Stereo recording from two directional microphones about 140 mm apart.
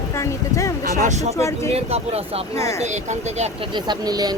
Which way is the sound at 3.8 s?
30° right (ahead or behind).